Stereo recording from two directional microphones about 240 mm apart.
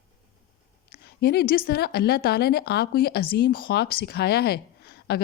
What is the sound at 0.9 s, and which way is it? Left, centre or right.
A woman's voice, left.